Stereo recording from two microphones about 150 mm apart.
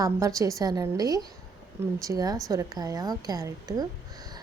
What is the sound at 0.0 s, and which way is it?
A woman's voice, 20° right (ahead or behind).